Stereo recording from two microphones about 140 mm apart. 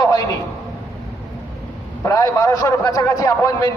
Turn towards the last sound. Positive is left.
turn(degrees=25)  # may be behind; listen again after turning